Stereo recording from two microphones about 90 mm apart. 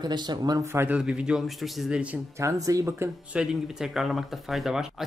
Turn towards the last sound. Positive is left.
turn(degrees=-5)  # may be behind; listen again after turning